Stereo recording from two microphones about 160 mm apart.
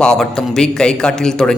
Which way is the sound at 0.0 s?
5° left (ahead or behind).